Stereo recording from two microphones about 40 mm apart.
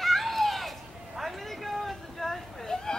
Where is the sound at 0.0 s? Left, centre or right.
Centre.